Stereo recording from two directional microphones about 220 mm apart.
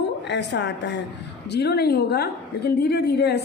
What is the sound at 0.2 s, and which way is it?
A woman's voice, 50° left (ahead or behind).